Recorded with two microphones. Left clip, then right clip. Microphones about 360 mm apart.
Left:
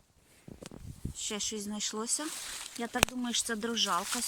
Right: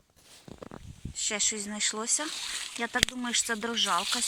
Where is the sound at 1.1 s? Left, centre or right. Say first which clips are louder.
Right 6 dB; centre.